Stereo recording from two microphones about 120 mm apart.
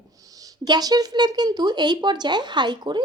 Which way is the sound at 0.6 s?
35° right (ahead or behind).